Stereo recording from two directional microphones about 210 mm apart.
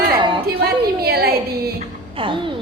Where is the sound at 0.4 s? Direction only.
50° right (ahead or behind).